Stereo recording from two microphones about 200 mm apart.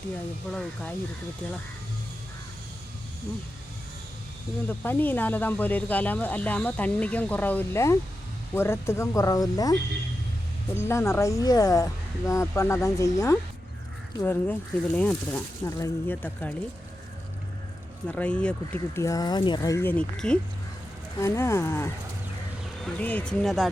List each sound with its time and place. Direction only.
0.5 s speech: 5° left (ahead or behind)
4.8 s speech: 10° left (ahead or behind)
10.8 s speech: 15° left (ahead or behind)
18.1 s speech: 5° left (ahead or behind)
23.0 s speech: 5° left (ahead or behind)